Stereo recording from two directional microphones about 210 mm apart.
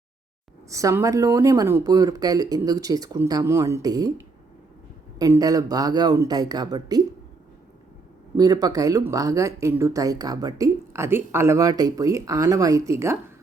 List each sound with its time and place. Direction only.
0.7 s speech: 15° right (ahead or behind)
5.2 s speech: 15° right (ahead or behind)
8.4 s speech: 20° right (ahead or behind)